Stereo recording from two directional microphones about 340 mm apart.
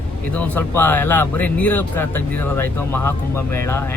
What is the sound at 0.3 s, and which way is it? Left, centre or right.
A man's voice, centre.